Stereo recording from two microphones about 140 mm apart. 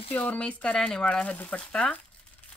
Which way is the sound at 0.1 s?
10° left (ahead or behind).